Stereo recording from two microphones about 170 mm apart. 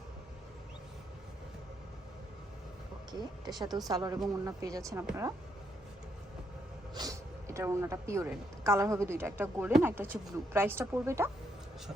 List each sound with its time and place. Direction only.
3.1 s speech: 25° right (ahead or behind)
6.9 s speech: 20° right (ahead or behind)